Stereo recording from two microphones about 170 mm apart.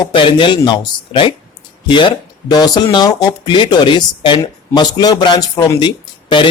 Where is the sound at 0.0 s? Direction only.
30° left (ahead or behind).